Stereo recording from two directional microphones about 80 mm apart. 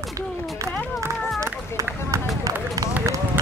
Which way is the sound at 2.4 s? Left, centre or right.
Right.